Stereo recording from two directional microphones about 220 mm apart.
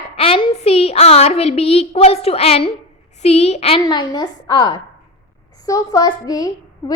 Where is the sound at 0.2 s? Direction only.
25° left (ahead or behind).